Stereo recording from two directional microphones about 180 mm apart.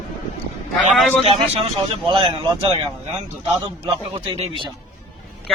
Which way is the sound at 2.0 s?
25° right (ahead or behind).